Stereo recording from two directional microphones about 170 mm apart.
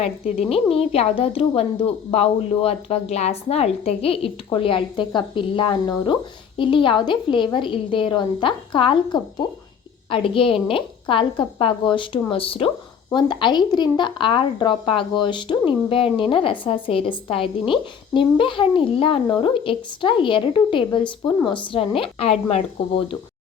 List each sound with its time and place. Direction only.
0.5 s a woman's voice: 35° left (ahead or behind)